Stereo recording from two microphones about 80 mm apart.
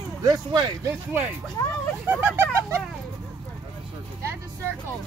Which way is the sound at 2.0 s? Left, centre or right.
Right.